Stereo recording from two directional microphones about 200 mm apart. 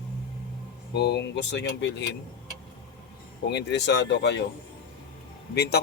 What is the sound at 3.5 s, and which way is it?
Speech, 60° left (ahead or behind).